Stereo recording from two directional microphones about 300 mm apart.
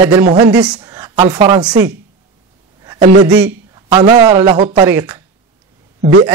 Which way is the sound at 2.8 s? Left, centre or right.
Centre.